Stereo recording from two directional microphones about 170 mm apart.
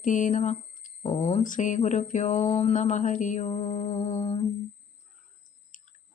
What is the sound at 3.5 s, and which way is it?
Mantra, 35° left (ahead or behind).